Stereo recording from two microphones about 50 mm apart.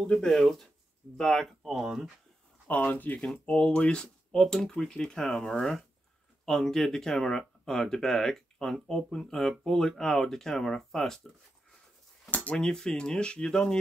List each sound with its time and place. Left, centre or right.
0.0 s speech: centre
0.4 s speech: centre
1.8 s speech: centre
2.7 s speech: left
3.4 s speech: left; by 11.1 s centre
12.5 s speech: centre